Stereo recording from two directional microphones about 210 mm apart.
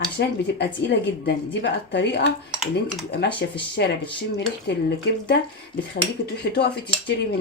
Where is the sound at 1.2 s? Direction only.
55° left (ahead or behind).